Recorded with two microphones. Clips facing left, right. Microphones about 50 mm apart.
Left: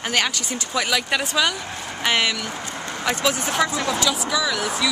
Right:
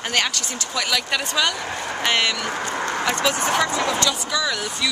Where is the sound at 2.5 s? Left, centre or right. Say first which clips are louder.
Right 6 dB; right.